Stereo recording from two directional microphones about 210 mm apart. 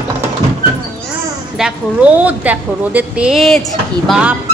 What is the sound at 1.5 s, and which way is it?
A woman's voice, 5° right (ahead or behind).